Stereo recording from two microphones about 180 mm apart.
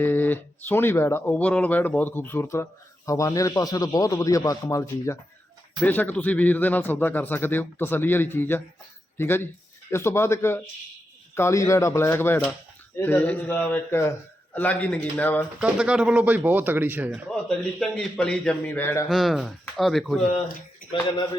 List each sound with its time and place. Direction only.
0.0 s a man's voice: 10° left (ahead or behind)
15.6 s speech: 5° right (ahead or behind); by 19.0 s 10° left (ahead or behind)
19.0 s speech: centre (ahead or behind)
20.9 s a man's voice: 30° left (ahead or behind)